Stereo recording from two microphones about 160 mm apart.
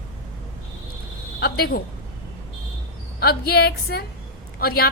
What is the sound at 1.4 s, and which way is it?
Speech, 80° left.